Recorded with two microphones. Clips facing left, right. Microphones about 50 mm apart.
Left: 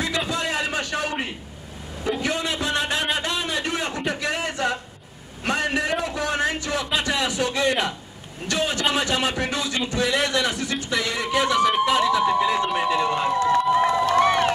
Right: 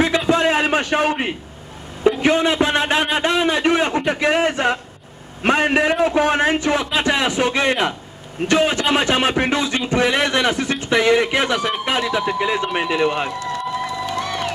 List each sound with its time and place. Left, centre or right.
0.3 s a sound: right
2.0 s a man's voice: right
13.3 s run: left